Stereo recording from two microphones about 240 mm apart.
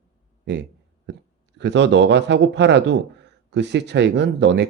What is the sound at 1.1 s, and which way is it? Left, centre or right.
Speech, right.